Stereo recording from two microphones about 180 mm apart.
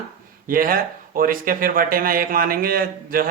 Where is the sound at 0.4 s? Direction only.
50° right (ahead or behind).